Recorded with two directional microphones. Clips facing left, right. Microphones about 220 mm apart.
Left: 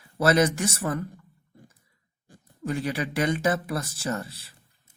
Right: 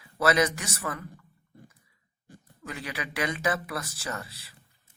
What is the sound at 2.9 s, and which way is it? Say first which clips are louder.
Speech: left 6 dB; 30° left (ahead or behind).